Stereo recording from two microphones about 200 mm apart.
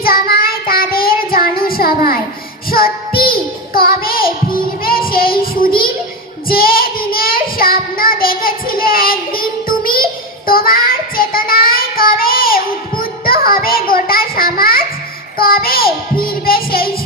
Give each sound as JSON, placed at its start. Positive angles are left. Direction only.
{"t": 0.0, "sound": "child singing", "side_deg": 50}
{"t": 1.5, "sound": "a sound", "side_deg": 50}
{"t": 2.6, "sound": "child singing", "side_deg": 50}
{"t": 15.4, "sound": "music", "side_deg": 45}